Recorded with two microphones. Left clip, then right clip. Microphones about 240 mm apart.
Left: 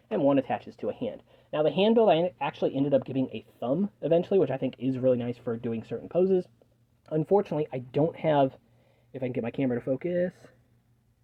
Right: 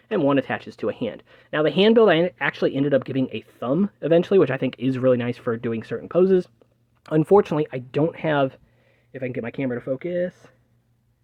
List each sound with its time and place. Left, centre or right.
0.1 s speech: right; by 10.5 s centre